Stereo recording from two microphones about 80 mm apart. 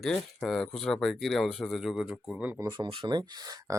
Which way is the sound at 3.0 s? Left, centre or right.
Right.